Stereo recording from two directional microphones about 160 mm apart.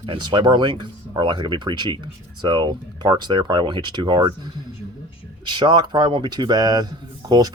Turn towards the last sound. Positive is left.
turn(degrees=-25)  # may be behind; listen again after turning